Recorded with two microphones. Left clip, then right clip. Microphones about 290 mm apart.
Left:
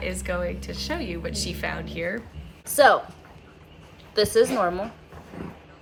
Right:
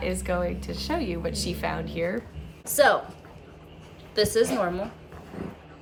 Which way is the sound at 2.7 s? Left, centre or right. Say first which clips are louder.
Left 3 dB; centre.